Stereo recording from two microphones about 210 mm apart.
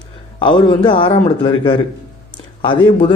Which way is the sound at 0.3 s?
25° left (ahead or behind).